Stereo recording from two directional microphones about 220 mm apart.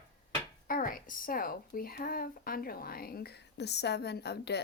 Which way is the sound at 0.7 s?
40° left (ahead or behind).